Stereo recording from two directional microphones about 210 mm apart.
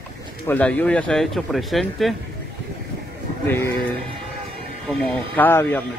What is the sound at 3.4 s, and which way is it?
Speech, 10° left (ahead or behind).